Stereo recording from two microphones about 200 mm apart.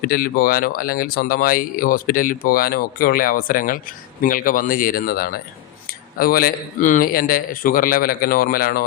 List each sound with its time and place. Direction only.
0.0 s speech: 50° left (ahead or behind)